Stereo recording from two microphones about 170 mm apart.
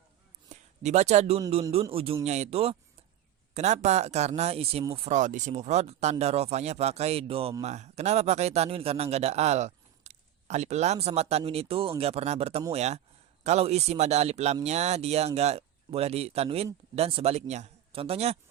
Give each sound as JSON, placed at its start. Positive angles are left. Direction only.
{"t": 0.8, "sound": "speech", "side_deg": -40}